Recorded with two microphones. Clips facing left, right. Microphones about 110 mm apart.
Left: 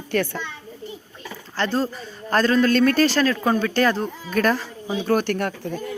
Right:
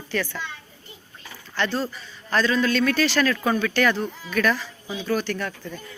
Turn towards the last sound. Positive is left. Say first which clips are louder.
# left 8 dB
turn(degrees=65)  # may be behind; listen again after turning